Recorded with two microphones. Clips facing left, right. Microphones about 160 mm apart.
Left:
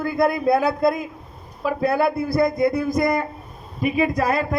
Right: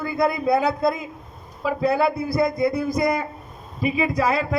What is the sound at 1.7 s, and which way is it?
A man's voice, 55° left (ahead or behind).